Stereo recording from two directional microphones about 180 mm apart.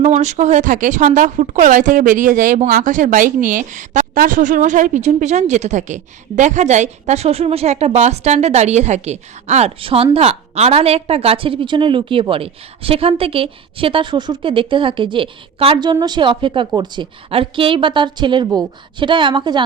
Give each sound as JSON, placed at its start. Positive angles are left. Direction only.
{"t": 0.0, "sound": "speech", "side_deg": -40}